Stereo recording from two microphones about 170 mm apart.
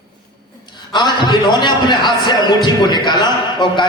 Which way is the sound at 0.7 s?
25° left (ahead or behind).